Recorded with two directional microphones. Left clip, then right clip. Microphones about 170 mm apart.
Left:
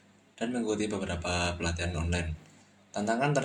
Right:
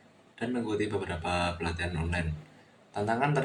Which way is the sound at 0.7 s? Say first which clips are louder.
Right 1 dB; 45° left (ahead or behind).